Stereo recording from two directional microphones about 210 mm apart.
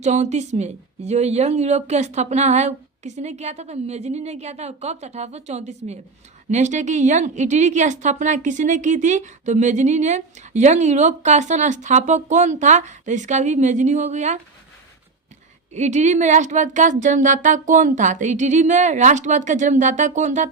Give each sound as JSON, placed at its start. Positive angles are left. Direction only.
{"t": 0.0, "sound": "a woman's voice", "side_deg": -35}
{"t": 15.7, "sound": "a woman's voice", "side_deg": -35}